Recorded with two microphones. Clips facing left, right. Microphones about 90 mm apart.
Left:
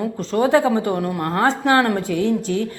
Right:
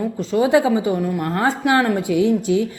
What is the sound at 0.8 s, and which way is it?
Speech, 50° left (ahead or behind).